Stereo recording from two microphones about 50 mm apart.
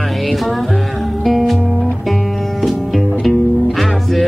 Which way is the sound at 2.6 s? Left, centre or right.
Centre.